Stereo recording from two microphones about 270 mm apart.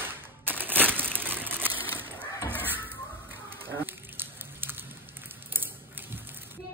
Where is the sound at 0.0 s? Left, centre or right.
Centre.